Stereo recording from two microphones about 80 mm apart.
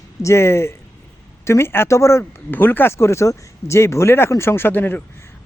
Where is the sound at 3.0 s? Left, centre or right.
Left.